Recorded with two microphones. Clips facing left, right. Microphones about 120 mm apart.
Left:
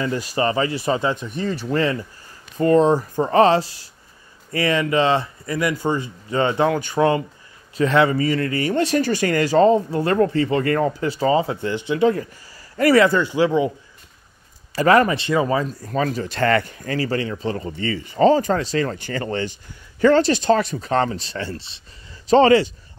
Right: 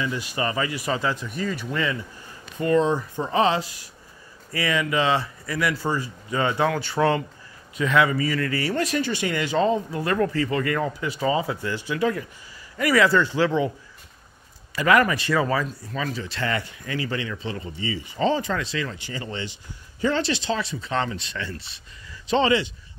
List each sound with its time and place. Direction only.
0.0 s speech: 45° left (ahead or behind)
3.3 s speech: 50° left (ahead or behind)
3.5 s speech: 30° left (ahead or behind)
7.7 s speech: 35° left (ahead or behind)
8.9 s speech: 45° left (ahead or behind)
13.1 s speech: 15° left (ahead or behind)
14.8 s speech: 30° left (ahead or behind)
15.6 s speech: 45° left (ahead or behind); by 21.8 s 25° left (ahead or behind)
22.3 s speech: 45° left (ahead or behind)